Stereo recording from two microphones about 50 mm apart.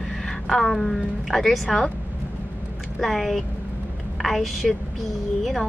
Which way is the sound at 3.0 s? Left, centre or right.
Centre.